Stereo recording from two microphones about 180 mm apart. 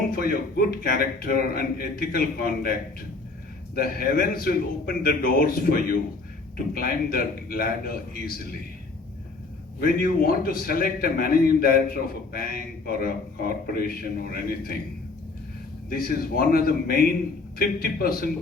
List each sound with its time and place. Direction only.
0.1 s a man's voice: 55° left (ahead or behind)
3.8 s a man's voice: 55° left (ahead or behind)
9.8 s a man's voice: 55° left (ahead or behind)
15.9 s a man's voice: 55° left (ahead or behind)